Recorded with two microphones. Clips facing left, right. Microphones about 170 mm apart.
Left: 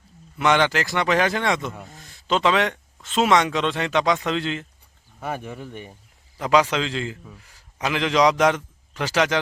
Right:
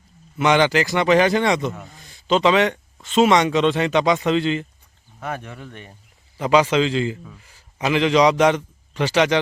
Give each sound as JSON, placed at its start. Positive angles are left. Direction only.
{"t": 0.3, "sound": "a man's voice", "side_deg": 0}
{"t": 5.2, "sound": "a man's voice", "side_deg": 10}